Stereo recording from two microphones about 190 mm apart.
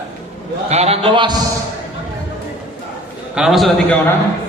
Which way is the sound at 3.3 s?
Centre (ahead or behind).